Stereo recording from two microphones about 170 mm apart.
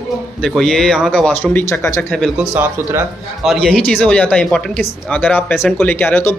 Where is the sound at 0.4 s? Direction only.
Centre (ahead or behind).